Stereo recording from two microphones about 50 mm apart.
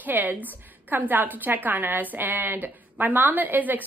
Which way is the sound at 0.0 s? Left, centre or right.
Right.